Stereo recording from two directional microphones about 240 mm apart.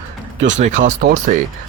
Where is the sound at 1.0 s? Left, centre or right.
Right.